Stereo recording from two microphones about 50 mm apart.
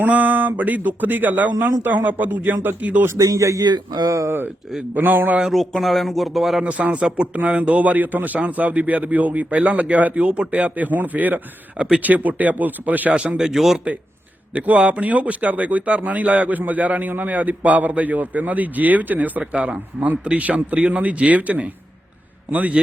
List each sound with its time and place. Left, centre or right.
0.0 s speech: right
3.3 s speech: right
4.9 s speech: right
5.4 s speech: centre
6.7 s speech: right
13.1 s speech: right
13.4 s a man's voice: centre
13.7 s speech: right